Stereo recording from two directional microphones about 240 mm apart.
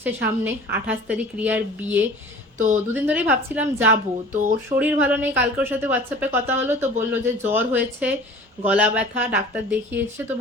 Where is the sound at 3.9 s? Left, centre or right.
Right.